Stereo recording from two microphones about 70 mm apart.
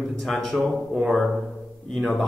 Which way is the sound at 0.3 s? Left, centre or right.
Centre.